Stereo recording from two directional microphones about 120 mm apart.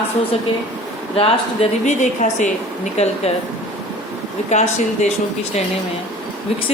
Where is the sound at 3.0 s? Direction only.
60° left (ahead or behind).